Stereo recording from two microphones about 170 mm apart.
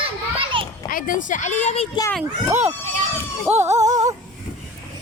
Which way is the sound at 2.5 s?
10° right (ahead or behind).